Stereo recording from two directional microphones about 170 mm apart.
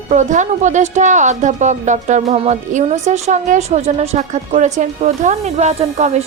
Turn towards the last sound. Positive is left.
turn(degrees=-40)  # may be behind; listen again after turning